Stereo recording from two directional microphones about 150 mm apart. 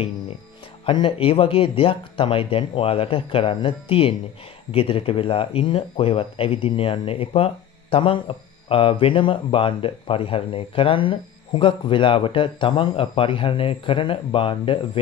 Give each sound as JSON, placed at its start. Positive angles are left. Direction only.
{"t": 0.8, "sound": "speech", "side_deg": 35}